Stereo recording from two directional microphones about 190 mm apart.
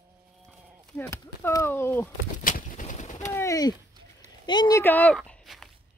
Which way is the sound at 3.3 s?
15° left (ahead or behind).